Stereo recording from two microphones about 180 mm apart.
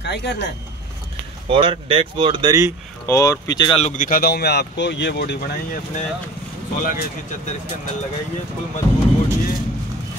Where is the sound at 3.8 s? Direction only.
45° left (ahead or behind); by 5.8 s 60° left (ahead or behind).